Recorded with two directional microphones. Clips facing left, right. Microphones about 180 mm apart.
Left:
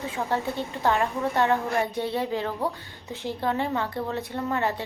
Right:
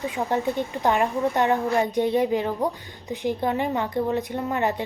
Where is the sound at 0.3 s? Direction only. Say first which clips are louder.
Right 4 dB; 15° right (ahead or behind).